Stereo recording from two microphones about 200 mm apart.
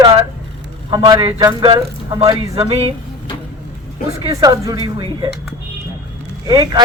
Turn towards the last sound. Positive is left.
turn(degrees=-20)  # may be behind; listen again after turning